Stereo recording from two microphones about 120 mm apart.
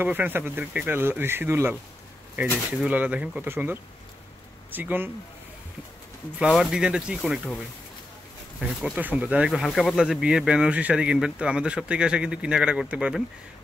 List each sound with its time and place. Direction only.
0.0 s speech: 15° right (ahead or behind)
6.4 s speech: 5° right (ahead or behind)
7.2 s speech: 5° left (ahead or behind)
8.5 s speech: 10° right (ahead or behind)
9.5 s speech: centre (ahead or behind)